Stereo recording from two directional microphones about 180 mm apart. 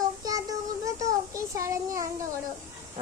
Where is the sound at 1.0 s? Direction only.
20° right (ahead or behind).